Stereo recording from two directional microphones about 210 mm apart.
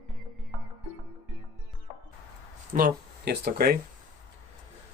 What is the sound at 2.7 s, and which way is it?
Speech, 45° right (ahead or behind).